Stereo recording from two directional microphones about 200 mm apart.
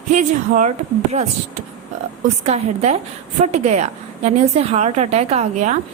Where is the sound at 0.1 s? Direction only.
35° right (ahead or behind).